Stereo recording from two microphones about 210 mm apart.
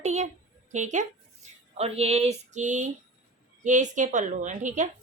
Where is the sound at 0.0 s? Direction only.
35° right (ahead or behind).